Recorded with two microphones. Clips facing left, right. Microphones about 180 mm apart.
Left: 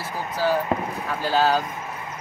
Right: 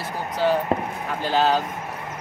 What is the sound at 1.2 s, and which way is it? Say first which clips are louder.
Speech: even; 20° right (ahead or behind).